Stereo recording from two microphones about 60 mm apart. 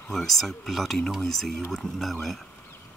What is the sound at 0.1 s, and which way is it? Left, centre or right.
Speech, centre.